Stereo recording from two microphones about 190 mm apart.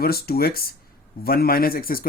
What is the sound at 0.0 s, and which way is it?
Speech, 55° left (ahead or behind).